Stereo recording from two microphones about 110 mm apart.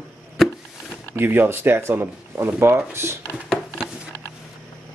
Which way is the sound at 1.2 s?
20° right (ahead or behind).